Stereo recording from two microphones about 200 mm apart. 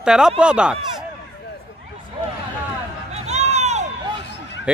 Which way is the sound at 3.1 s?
35° right (ahead or behind).